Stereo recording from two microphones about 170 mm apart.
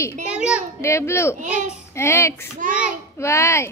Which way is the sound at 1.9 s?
15° left (ahead or behind).